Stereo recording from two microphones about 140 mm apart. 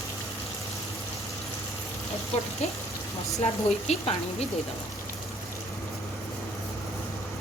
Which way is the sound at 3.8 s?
45° left (ahead or behind).